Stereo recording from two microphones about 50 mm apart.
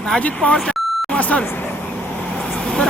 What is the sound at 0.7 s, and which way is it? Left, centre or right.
Beep, centre.